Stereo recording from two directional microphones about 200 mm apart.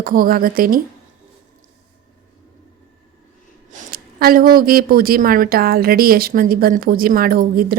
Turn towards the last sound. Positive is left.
turn(degrees=-45)  # may be behind; listen again after turning